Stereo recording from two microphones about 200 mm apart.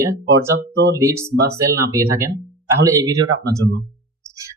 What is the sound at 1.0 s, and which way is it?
Speech, 15° right (ahead or behind).